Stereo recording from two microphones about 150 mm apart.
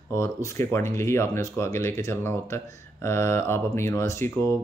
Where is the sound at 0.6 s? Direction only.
15° left (ahead or behind).